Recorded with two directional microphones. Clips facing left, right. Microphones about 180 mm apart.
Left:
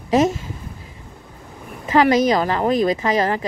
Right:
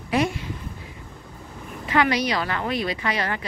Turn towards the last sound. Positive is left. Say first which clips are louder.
# left 7 dB
turn(degrees=40)  # may be behind; listen again after turning